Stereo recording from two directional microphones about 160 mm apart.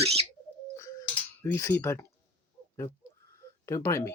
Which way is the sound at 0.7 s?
20° left (ahead or behind).